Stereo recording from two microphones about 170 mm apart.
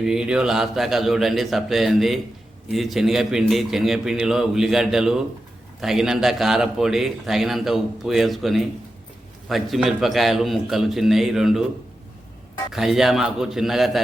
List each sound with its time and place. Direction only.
0.0 s a man's voice: 5° right (ahead or behind)
12.7 s a man's voice: centre (ahead or behind)